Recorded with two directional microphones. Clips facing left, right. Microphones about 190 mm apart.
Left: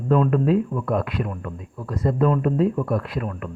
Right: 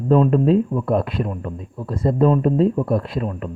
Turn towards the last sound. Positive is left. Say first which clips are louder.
# right 3 dB
turn(degrees=-25)  # may be behind; listen again after turning